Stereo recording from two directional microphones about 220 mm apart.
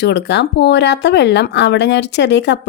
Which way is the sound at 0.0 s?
50° left (ahead or behind).